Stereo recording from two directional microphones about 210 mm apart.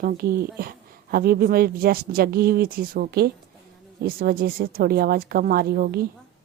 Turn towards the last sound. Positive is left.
turn(degrees=-45)  # may be behind; listen again after turning